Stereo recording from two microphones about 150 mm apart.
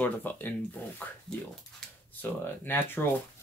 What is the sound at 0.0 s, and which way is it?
Speech, 10° left (ahead or behind).